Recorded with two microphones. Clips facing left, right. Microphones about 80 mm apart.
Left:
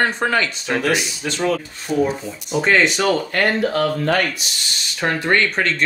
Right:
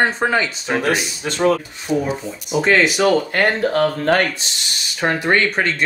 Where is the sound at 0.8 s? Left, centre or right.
Right.